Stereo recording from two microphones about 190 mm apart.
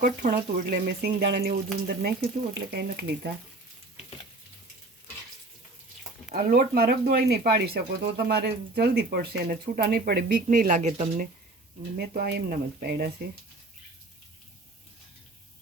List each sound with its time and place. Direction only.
0.0 s speech: 50° right (ahead or behind)
6.3 s speech: 50° right (ahead or behind); by 11.1 s 35° right (ahead or behind)
11.9 s speech: 55° right (ahead or behind)